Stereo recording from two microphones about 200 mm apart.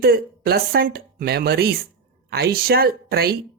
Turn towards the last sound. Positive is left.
turn(degrees=-50)  # may be behind; listen again after turning